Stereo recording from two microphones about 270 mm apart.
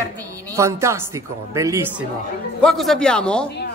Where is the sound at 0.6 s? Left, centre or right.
Centre.